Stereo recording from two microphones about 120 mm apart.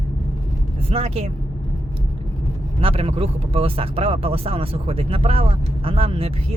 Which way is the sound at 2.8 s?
55° right (ahead or behind).